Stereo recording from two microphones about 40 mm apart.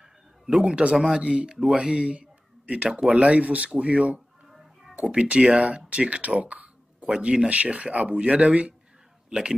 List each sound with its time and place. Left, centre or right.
0.5 s speech: right
4.5 s music: centre
5.2 s speech: right
5.9 s a sound: right
7.1 s speech: right
7.4 s speech: right
9.3 s speech: right